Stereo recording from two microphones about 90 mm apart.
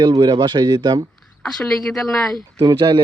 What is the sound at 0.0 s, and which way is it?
A man's voice, 50° right (ahead or behind).